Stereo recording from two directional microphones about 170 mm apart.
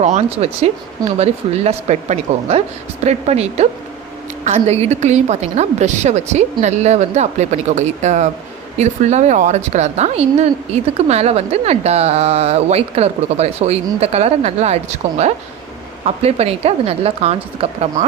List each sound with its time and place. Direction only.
0.0 s a woman's voice: 40° right (ahead or behind)
16.0 s a woman's voice: 35° right (ahead or behind)